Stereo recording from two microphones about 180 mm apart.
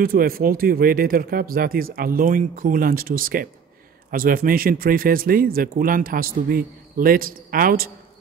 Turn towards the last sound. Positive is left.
turn(degrees=-55)  # may be behind; listen again after turning